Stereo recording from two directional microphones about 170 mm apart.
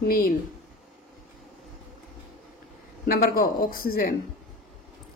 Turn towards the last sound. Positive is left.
turn(degrees=60)  # may be behind; listen again after turning